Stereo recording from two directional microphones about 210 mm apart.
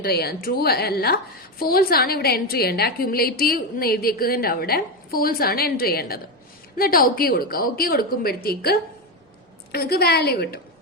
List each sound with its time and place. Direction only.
0.0 s a woman's voice: 50° left (ahead or behind)